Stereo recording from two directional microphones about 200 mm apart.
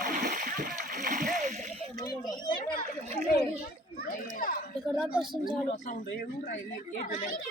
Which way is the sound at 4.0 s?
45° left (ahead or behind).